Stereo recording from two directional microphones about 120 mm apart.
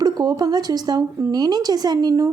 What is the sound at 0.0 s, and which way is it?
A woman's voice, 30° right (ahead or behind).